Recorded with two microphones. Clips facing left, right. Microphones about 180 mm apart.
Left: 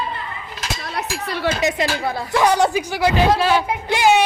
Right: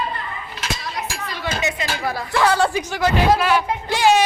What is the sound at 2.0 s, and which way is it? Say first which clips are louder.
Speech: even; 20° left (ahead or behind).